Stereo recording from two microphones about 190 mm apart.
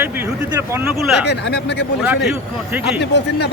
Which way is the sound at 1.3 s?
65° left (ahead or behind).